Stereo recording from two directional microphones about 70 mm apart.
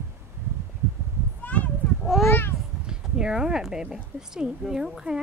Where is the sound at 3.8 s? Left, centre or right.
Centre.